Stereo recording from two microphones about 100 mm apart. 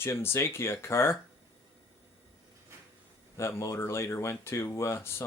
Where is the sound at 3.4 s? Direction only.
30° left (ahead or behind).